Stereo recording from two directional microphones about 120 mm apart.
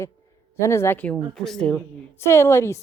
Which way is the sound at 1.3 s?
5° left (ahead or behind).